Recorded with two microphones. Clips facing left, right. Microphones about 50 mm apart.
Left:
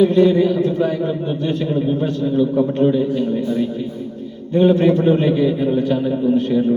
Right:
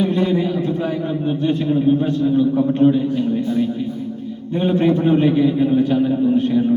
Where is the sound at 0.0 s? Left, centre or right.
Centre.